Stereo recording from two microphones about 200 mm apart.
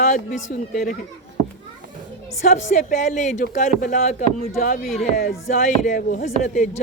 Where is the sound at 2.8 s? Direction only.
40° left (ahead or behind).